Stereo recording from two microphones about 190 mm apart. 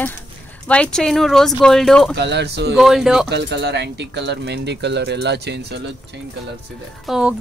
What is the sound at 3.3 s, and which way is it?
Speech, 65° right (ahead or behind).